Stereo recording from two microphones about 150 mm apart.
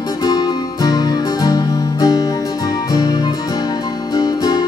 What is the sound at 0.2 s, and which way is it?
Music, 25° left (ahead or behind).